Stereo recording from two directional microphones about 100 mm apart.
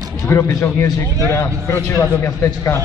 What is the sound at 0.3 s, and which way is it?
A man's voice, 30° left (ahead or behind).